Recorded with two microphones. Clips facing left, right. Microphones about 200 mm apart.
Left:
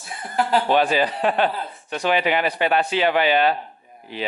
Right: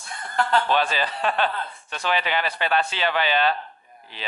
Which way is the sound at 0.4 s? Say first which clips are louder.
Left 3 dB; 5° left (ahead or behind).